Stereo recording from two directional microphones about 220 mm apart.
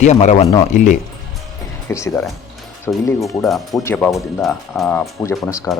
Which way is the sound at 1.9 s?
15° left (ahead or behind).